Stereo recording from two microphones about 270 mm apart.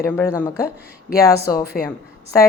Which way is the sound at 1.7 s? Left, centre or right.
Centre.